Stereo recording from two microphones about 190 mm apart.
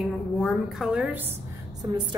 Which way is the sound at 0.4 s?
Centre (ahead or behind).